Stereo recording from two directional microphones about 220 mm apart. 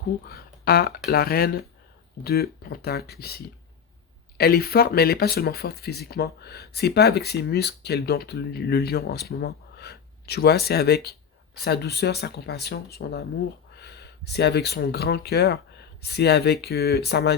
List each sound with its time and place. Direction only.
0.3 s speech: 45° left (ahead or behind)